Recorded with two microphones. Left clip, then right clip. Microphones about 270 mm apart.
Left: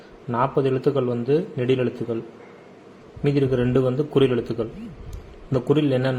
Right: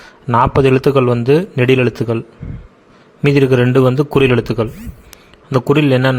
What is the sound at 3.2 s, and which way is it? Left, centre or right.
A man's voice, right.